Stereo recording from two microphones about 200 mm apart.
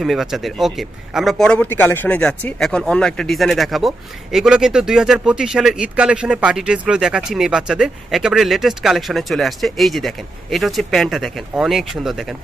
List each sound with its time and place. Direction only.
0.0 s a man's voice: centre (ahead or behind)